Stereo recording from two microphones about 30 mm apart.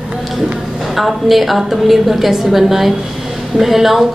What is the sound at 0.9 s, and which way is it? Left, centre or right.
A woman's voice, centre.